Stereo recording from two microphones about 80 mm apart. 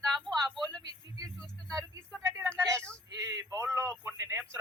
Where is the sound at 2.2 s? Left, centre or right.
Right.